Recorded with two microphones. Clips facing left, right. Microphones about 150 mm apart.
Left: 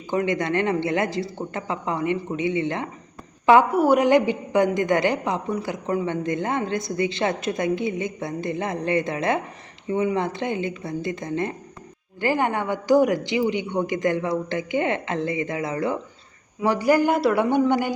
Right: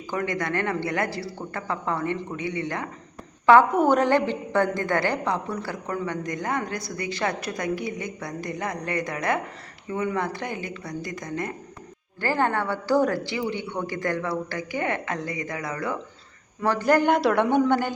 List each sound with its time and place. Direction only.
0.1 s a woman's voice: 20° left (ahead or behind)
16.6 s a woman's voice: 10° left (ahead or behind)